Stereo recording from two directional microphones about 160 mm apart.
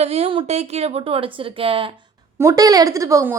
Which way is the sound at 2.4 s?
20° right (ahead or behind).